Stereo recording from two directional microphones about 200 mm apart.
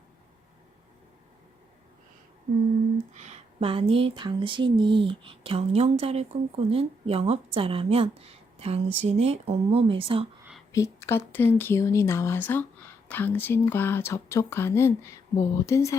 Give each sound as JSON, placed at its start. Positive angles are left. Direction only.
{"t": 3.2, "sound": "speech", "side_deg": -35}
{"t": 10.7, "sound": "speech", "side_deg": 15}